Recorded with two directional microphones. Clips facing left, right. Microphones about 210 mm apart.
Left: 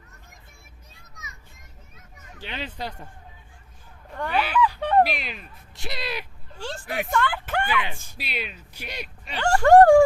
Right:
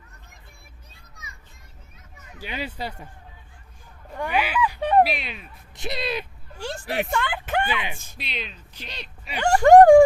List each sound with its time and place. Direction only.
2.4 s speech: 10° right (ahead or behind)
4.1 s speech: 10° right (ahead or behind)
5.0 s speech: centre (ahead or behind)
5.7 s speech: 20° right (ahead or behind)
6.8 s speech: 25° right (ahead or behind)
8.2 s speech: 5° left (ahead or behind)
9.2 s speech: 15° right (ahead or behind)